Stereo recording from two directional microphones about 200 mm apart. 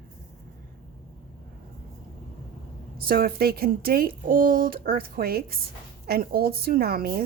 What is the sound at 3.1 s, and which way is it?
A woman's voice, 50° right (ahead or behind).